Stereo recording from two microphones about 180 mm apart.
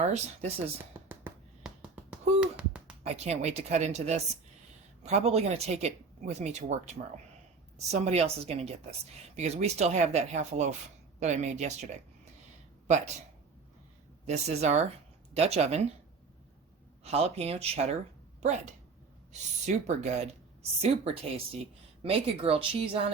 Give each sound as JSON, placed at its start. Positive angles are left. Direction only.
{"t": 0.0, "sound": "speech", "side_deg": -40}
{"t": 0.9, "sound": "music", "side_deg": -10}
{"t": 2.4, "sound": "a sound", "side_deg": -5}
{"t": 3.0, "sound": "speech", "side_deg": -35}
{"t": 14.3, "sound": "speech", "side_deg": -40}
{"t": 17.0, "sound": "speech", "side_deg": -35}